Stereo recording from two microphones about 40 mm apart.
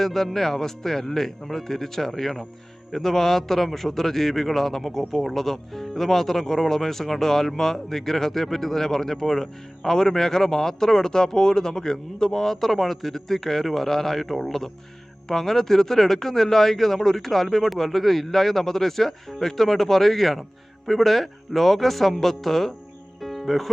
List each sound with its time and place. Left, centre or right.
0.0 s a man's voice: centre
23.2 s music: centre